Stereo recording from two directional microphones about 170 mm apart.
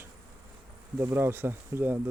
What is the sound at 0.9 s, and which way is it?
Speech, 15° right (ahead or behind).